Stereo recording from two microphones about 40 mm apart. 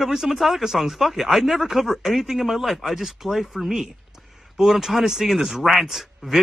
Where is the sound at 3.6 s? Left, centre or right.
Centre.